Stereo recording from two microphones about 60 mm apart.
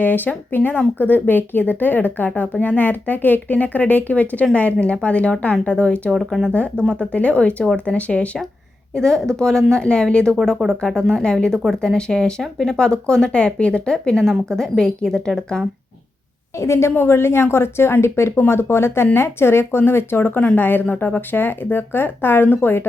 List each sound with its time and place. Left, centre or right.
0.0 s a woman's voice: left
6.1 s speech: centre
6.5 s a woman's voice: centre
9.0 s speech: centre
16.6 s speech: left